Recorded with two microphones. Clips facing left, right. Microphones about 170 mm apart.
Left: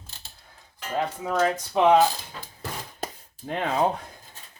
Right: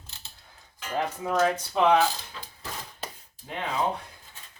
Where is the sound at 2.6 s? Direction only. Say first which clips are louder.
Left 5 dB; 50° left (ahead or behind).